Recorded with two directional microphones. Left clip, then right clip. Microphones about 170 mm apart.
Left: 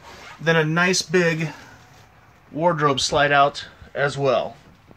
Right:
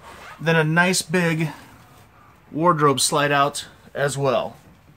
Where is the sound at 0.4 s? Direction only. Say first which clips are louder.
Even; 10° right (ahead or behind).